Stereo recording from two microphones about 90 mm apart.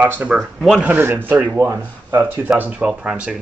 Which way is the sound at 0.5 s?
5° right (ahead or behind).